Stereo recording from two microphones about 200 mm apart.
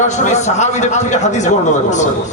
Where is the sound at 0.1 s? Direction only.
35° left (ahead or behind).